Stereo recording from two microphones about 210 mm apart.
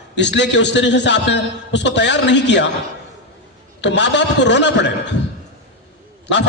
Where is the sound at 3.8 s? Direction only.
55° left (ahead or behind).